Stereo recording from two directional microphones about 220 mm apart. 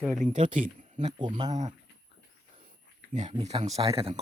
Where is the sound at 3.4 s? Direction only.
30° right (ahead or behind).